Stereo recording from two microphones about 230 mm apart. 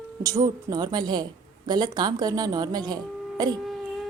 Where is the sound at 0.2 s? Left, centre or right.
Centre.